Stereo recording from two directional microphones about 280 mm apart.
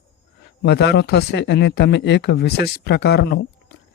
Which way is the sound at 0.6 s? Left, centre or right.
Left.